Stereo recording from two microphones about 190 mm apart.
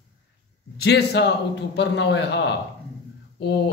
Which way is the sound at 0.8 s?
60° left (ahead or behind).